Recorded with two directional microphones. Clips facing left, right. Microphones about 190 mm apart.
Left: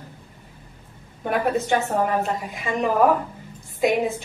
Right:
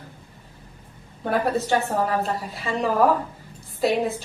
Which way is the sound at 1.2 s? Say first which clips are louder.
Even; 15° left (ahead or behind).